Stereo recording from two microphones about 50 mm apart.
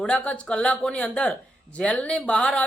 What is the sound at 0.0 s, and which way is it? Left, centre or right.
A man's voice, centre.